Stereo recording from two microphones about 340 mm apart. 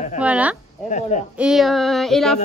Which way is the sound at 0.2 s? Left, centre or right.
Centre.